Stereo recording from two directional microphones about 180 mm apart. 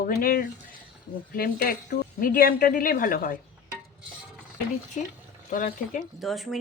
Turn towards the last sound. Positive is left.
turn(degrees=0)  # may be behind; listen again after turning